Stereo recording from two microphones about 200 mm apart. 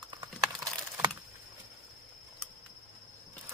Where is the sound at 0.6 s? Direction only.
15° right (ahead or behind).